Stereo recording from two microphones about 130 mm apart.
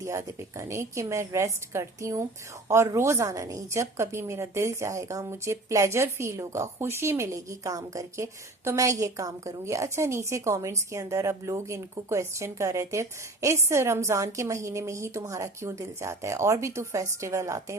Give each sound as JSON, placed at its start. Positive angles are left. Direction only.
{"t": 0.0, "sound": "a woman's voice", "side_deg": -25}